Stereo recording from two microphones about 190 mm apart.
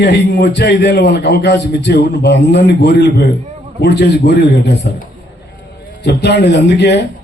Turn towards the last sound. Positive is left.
turn(degrees=65)  # may be behind; listen again after turning